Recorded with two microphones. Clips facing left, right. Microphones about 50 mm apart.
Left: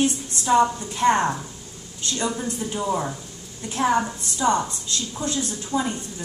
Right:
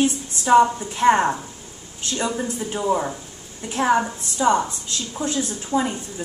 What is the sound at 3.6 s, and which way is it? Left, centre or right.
A woman's voice, right.